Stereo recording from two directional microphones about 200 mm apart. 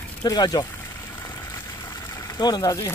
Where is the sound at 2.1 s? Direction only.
20° left (ahead or behind).